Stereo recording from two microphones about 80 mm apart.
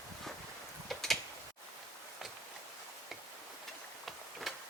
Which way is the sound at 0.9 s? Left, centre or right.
Centre.